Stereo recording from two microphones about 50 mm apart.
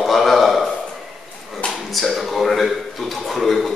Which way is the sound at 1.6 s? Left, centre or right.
Centre.